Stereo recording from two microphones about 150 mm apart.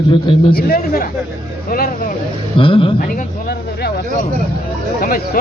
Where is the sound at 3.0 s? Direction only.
80° left.